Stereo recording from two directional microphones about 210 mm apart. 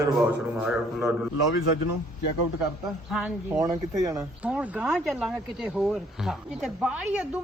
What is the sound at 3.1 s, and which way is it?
Speech, 5° right (ahead or behind).